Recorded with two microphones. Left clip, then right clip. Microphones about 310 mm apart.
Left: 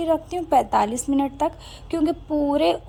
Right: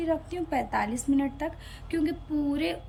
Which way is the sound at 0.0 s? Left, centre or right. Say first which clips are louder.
Left 7 dB; centre.